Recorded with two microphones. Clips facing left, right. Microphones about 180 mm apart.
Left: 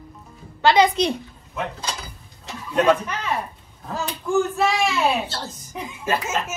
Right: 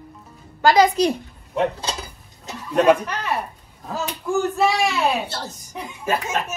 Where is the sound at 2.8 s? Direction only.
10° right (ahead or behind).